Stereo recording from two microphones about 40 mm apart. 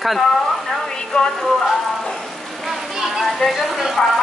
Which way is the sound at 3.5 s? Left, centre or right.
Centre.